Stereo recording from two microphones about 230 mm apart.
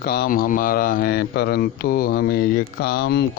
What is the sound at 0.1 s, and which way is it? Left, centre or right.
Speech, left.